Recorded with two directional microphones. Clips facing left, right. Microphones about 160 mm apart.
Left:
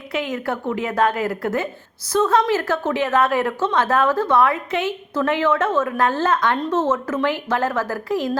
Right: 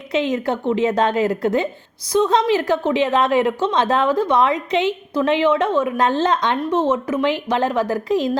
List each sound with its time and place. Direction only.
0.1 s a woman's voice: 20° right (ahead or behind)